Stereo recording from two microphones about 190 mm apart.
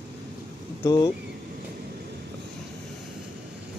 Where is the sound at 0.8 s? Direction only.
20° left (ahead or behind).